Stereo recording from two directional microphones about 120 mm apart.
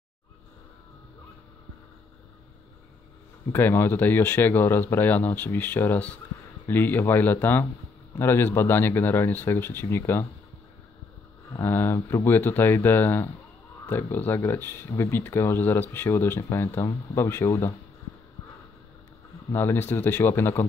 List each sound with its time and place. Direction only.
3.5 s speech: 20° left (ahead or behind)
11.6 s speech: 20° left (ahead or behind)
19.5 s speech: 20° left (ahead or behind)